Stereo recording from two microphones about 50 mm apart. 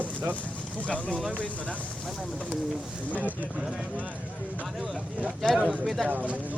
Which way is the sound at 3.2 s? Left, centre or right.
Right.